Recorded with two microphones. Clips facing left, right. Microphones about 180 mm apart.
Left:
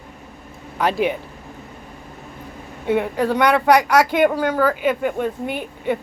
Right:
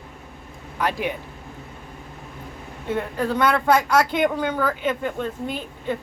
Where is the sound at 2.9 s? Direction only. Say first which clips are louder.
Left 5 dB; 75° left (ahead or behind).